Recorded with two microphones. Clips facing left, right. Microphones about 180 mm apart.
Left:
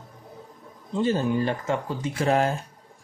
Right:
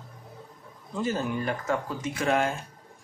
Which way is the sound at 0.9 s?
30° left (ahead or behind).